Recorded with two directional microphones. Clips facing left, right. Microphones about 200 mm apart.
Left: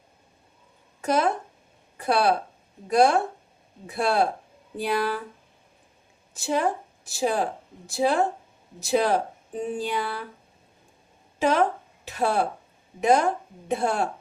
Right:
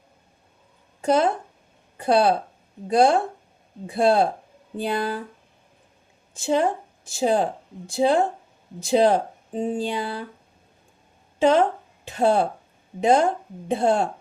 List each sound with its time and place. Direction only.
1.0 s speech: 25° right (ahead or behind)
6.3 s speech: 25° right (ahead or behind)
11.3 s speech: 30° right (ahead or behind)